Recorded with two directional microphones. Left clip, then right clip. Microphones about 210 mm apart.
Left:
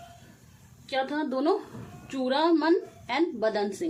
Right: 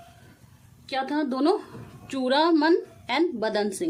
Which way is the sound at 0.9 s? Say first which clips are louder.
Right 2 dB; 50° right (ahead or behind).